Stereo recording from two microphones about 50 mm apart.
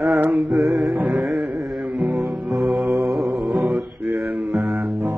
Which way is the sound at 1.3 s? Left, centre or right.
Centre.